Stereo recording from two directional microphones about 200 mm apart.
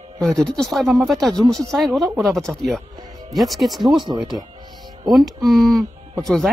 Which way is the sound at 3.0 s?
20° right (ahead or behind).